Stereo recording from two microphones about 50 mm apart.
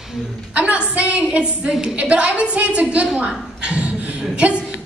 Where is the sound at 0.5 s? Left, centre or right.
Right.